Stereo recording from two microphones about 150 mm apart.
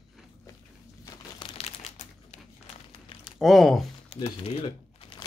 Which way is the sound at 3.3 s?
Centre (ahead or behind).